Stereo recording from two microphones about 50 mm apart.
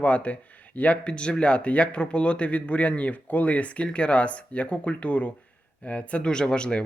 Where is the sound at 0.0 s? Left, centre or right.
Left.